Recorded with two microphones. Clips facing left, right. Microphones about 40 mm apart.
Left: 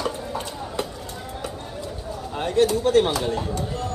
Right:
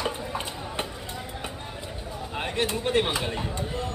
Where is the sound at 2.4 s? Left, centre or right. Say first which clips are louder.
Left 8 dB; right.